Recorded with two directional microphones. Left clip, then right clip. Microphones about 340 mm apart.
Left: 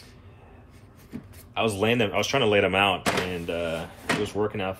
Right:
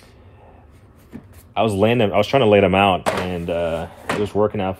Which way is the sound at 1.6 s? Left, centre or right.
Right.